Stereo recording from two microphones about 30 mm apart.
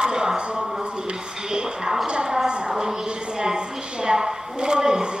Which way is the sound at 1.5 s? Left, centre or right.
Right.